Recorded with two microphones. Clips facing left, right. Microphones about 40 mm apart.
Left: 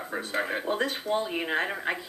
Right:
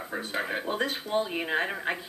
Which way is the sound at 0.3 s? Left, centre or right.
Centre.